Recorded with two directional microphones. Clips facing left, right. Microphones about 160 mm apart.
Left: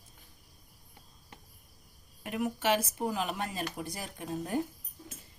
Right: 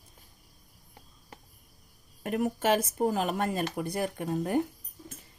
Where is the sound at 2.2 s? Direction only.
45° right (ahead or behind).